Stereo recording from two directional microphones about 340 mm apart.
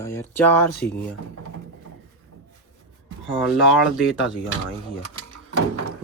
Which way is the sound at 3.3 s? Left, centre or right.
Centre.